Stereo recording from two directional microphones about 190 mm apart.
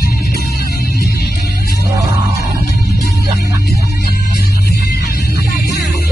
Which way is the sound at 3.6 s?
60° left (ahead or behind).